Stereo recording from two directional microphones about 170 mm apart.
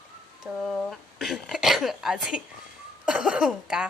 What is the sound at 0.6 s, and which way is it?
Speech, 5° left (ahead or behind).